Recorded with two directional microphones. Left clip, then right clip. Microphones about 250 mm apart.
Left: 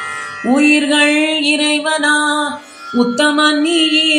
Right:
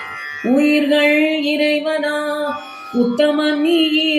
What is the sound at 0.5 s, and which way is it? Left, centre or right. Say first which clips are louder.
Music: left 3 dB; centre.